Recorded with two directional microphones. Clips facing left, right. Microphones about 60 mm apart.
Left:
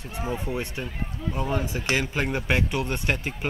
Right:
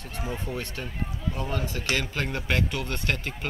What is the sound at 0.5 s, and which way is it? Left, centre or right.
Speech, centre.